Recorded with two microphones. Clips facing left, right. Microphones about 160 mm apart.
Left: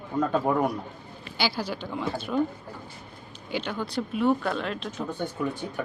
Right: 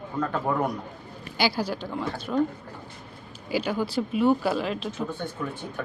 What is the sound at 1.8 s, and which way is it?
Speech, centre (ahead or behind).